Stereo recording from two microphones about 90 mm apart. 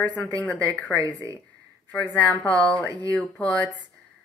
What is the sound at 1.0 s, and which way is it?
Speech, 40° right (ahead or behind).